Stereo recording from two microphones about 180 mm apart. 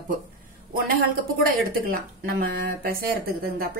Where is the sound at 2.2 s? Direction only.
55° right (ahead or behind).